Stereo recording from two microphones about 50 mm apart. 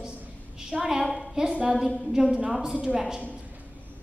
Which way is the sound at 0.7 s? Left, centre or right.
Centre.